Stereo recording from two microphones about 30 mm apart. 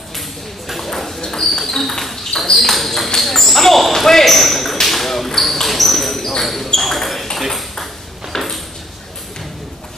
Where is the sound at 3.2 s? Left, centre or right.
Centre.